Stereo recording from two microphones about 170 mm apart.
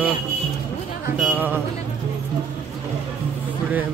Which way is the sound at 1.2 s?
10° right (ahead or behind).